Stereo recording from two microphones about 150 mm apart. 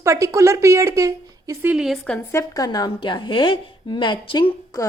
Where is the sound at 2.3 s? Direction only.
25° left (ahead or behind).